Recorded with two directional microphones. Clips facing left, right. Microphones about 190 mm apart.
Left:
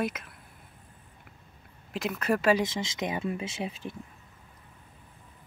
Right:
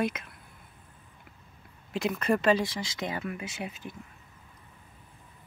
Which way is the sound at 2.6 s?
20° left (ahead or behind).